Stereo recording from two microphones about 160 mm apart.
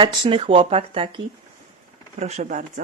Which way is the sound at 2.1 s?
45° right (ahead or behind).